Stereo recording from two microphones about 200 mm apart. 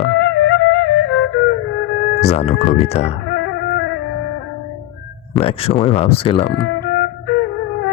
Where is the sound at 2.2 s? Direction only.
30° left (ahead or behind).